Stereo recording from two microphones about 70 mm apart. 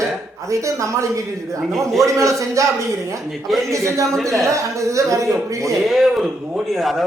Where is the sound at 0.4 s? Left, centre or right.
Right.